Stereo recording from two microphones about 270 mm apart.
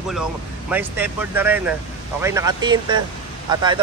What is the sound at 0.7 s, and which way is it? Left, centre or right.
A man's voice, centre.